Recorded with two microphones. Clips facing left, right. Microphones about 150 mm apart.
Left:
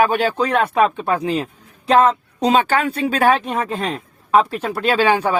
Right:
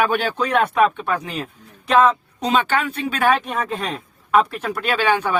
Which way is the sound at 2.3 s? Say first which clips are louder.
Left 3 dB; 35° left (ahead or behind).